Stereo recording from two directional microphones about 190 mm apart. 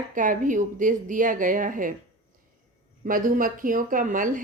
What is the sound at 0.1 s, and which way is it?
A woman's voice, 45° right (ahead or behind).